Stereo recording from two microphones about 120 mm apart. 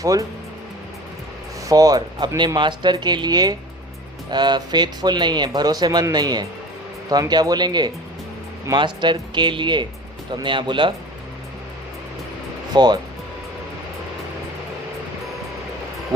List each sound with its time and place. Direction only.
0.0 s speech: 30° right (ahead or behind)
1.7 s speech: 30° right (ahead or behind)
12.7 s speech: 35° right (ahead or behind)